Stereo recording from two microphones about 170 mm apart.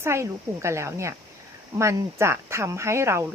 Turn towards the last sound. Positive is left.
turn(degrees=-15)  # may be behind; listen again after turning